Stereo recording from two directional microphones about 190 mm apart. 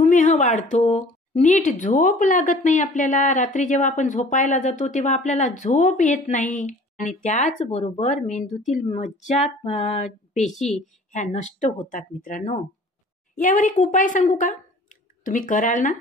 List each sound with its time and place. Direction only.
0.0 s a woman's voice: 40° left (ahead or behind)
10.4 s speech: centre (ahead or behind)
11.1 s a woman's voice: 40° left (ahead or behind)